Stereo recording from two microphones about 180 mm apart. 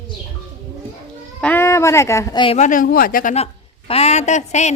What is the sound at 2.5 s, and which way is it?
Speech, 45° left (ahead or behind).